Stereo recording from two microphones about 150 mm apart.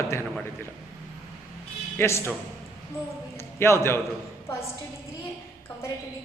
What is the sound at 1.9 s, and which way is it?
Speech, 15° left (ahead or behind).